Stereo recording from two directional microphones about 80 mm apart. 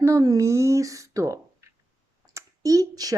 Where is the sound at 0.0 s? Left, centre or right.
Right.